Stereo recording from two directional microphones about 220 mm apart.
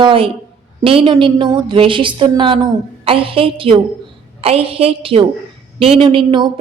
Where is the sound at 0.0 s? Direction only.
25° right (ahead or behind).